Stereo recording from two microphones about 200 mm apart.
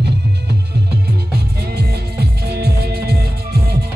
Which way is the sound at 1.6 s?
55° right (ahead or behind).